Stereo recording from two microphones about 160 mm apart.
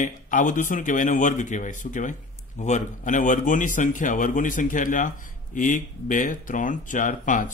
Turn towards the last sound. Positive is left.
turn(degrees=55)  # may be behind; listen again after turning